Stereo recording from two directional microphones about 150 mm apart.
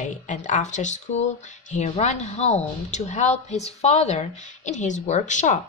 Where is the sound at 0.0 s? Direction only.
55° left (ahead or behind).